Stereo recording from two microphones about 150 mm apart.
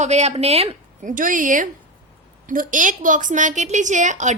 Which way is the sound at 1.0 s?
65° right (ahead or behind).